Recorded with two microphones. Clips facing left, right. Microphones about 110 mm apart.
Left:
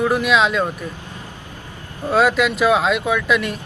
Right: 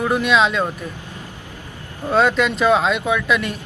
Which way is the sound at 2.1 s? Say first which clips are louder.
Even; 5° left (ahead or behind).